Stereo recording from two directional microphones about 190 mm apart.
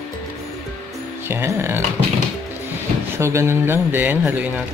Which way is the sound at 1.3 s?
15° right (ahead or behind).